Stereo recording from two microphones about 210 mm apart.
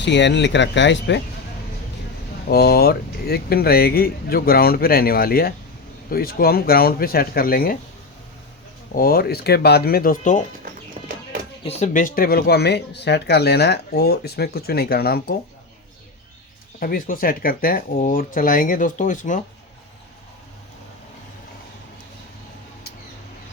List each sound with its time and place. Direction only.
0.0 s speech: 55° left (ahead or behind)
2.5 s speech: 50° left (ahead or behind)
9.0 s speech: 45° left (ahead or behind)
11.6 s speech: 35° left (ahead or behind)
16.8 s speech: 45° left (ahead or behind)